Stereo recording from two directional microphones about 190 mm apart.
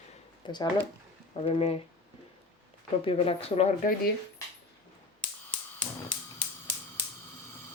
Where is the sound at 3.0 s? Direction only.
30° left (ahead or behind).